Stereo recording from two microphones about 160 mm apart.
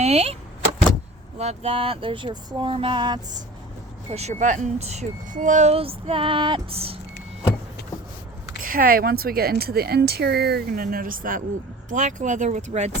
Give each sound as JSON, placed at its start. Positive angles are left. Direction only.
{"t": 0.0, "sound": "speech", "side_deg": -40}
{"t": 1.4, "sound": "speech", "side_deg": -40}
{"t": 4.1, "sound": "speech", "side_deg": -45}
{"t": 8.6, "sound": "speech", "side_deg": -60}